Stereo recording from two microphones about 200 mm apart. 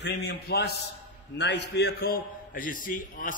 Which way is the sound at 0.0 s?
55° left (ahead or behind).